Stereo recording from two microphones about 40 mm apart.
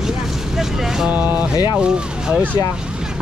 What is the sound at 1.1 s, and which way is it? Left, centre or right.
Speech, right.